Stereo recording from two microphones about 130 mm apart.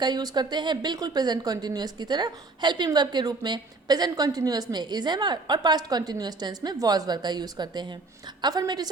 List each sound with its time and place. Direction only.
0.0 s a woman's voice: 35° right (ahead or behind)